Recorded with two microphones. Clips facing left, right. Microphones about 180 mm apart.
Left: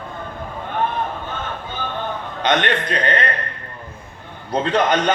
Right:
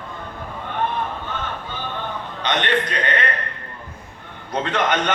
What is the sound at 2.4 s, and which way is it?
Speech, 45° left (ahead or behind).